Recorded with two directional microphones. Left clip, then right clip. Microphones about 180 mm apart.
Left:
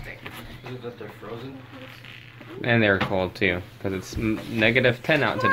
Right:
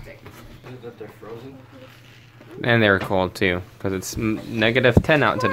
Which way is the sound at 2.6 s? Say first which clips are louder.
Right 3 dB; 35° right (ahead or behind).